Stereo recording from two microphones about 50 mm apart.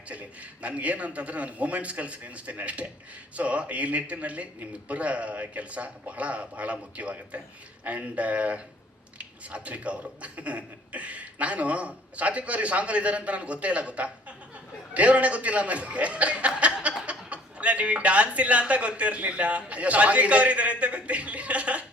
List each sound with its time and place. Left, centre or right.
0.1 s speech: right
16.6 s chuckle: right
17.1 s speech: right